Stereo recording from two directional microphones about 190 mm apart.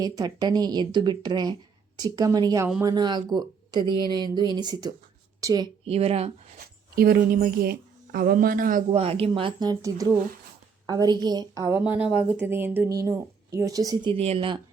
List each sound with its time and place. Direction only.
0.0 s speech: 20° right (ahead or behind)
5.8 s a woman's voice: 30° right (ahead or behind)
6.9 s speech: 50° right (ahead or behind)
8.9 s speech: 30° right (ahead or behind)
11.8 s speech: 5° right (ahead or behind); by 14.6 s 25° right (ahead or behind)